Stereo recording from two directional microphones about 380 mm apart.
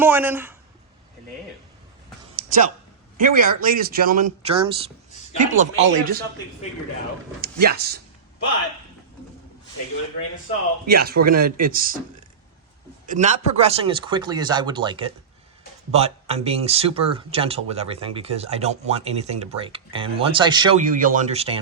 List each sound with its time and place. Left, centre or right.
0.0 s speech: centre
2.3 s a sound: right
3.2 s speech: right
7.4 s speech: right
10.8 s speech: right
13.1 s speech: centre